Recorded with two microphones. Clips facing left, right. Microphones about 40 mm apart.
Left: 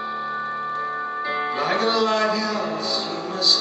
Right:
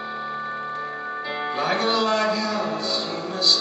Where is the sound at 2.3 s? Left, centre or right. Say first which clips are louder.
Left 1 dB; centre.